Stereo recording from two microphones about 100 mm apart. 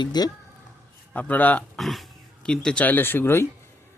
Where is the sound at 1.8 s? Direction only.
Centre (ahead or behind).